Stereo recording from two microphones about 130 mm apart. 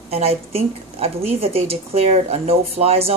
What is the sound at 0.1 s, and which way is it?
A woman's voice, 50° right (ahead or behind).